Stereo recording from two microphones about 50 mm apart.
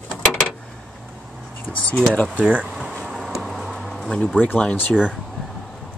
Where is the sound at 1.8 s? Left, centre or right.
Left.